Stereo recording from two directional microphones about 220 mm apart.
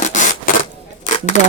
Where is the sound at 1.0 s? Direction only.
35° left (ahead or behind).